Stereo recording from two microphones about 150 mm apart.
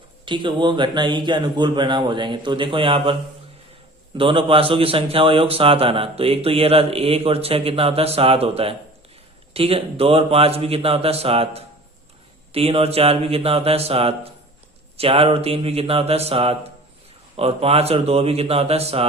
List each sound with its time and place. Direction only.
0.3 s a man's voice: 35° right (ahead or behind)
4.2 s a man's voice: 35° right (ahead or behind)